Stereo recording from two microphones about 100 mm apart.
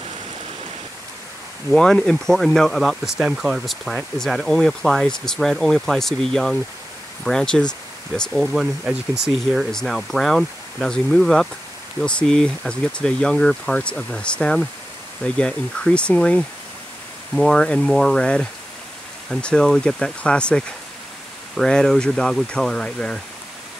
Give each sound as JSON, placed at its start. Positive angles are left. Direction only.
{"t": 1.7, "sound": "speech", "side_deg": 5}